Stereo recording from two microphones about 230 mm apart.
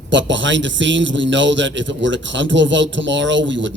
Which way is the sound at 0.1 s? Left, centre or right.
Right.